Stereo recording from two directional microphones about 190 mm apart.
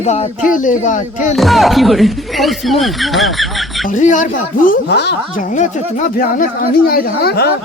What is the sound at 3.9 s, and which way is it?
Speech, 40° left (ahead or behind).